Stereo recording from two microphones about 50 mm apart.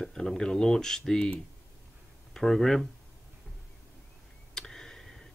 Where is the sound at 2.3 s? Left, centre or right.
Centre.